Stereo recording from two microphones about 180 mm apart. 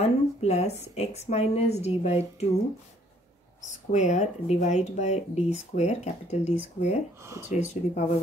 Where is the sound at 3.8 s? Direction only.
40° left (ahead or behind).